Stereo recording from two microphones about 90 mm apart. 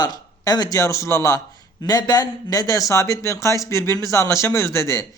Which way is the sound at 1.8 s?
45° left (ahead or behind).